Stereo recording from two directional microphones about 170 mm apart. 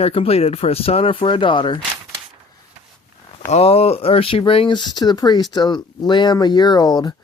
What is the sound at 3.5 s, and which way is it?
Speech, 35° left (ahead or behind).